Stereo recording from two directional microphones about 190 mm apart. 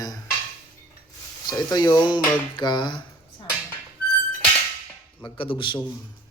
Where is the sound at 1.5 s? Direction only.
20° left (ahead or behind).